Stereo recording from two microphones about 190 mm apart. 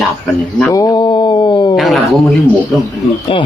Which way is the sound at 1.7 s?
Centre (ahead or behind).